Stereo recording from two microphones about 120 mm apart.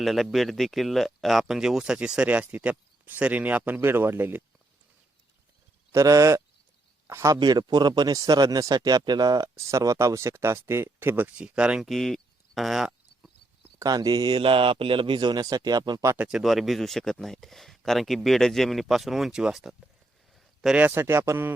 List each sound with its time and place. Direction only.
0.0 s speech: centre (ahead or behind); by 4.4 s 15° right (ahead or behind)
5.9 s speech: 25° right (ahead or behind)
7.3 s speech: 35° right (ahead or behind); by 13.3 s centre (ahead or behind)
13.7 s a man's voice: 30° right (ahead or behind)
16.1 s speech: 10° right (ahead or behind)
16.4 s speech: centre (ahead or behind)
20.3 s a sound: centre (ahead or behind)
20.7 s speech: 15° right (ahead or behind)